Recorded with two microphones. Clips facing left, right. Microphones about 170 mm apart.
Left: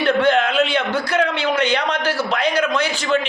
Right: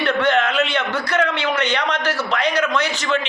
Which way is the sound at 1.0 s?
10° left (ahead or behind).